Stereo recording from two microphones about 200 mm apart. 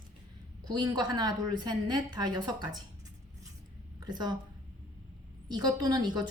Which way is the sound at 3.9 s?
20° right (ahead or behind).